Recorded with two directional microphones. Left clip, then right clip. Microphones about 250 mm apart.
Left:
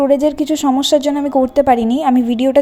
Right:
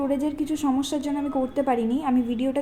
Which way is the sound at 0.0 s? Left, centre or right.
Left.